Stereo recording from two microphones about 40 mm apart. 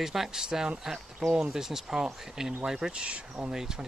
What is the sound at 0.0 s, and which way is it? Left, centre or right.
Speech, centre.